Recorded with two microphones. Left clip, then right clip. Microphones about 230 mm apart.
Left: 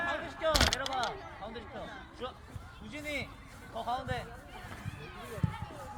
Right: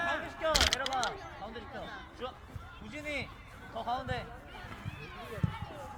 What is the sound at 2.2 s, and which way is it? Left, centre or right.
Music, centre.